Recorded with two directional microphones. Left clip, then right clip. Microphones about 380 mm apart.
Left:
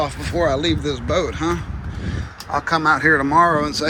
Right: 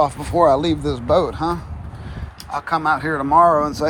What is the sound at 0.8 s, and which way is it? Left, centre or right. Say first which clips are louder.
Speech: even; right.